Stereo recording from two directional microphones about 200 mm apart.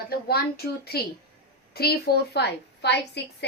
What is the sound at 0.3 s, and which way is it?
A woman's voice, 50° left (ahead or behind).